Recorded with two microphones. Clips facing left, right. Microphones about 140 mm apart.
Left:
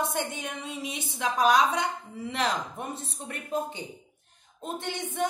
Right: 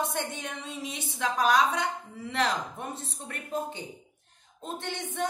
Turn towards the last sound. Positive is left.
turn(degrees=10)  # may be behind; listen again after turning